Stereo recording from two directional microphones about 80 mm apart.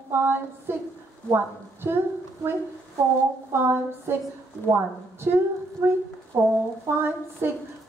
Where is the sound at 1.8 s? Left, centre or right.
Right.